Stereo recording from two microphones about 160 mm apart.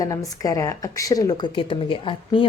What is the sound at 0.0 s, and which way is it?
A woman's voice, 20° left (ahead or behind).